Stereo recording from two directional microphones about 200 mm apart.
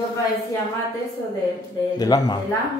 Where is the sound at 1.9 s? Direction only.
20° left (ahead or behind).